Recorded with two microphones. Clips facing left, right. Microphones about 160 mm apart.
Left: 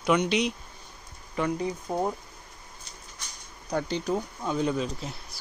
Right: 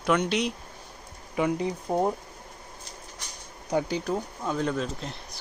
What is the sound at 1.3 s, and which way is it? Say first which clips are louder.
Speech: right 2 dB; 15° right (ahead or behind).